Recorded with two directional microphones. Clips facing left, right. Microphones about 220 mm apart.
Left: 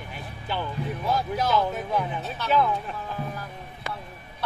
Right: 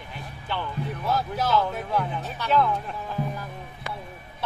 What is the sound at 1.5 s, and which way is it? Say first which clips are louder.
Speech: right 1 dB; 10° left (ahead or behind).